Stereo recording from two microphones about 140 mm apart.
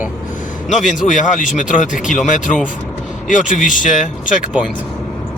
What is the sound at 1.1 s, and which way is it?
Speech, 65° left (ahead or behind).